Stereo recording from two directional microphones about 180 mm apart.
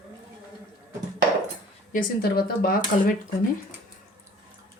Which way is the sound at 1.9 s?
55° left (ahead or behind).